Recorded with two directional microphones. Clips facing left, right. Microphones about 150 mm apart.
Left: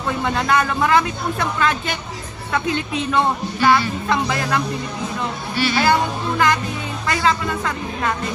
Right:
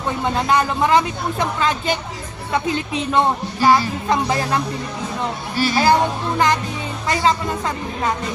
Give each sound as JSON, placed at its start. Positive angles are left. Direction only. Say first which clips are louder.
{"t": 0.2, "sound": "speech", "louder": "right 1 dB", "side_deg": -25}
{"t": 5.5, "sound": "speech", "louder": "right 2 dB", "side_deg": -40}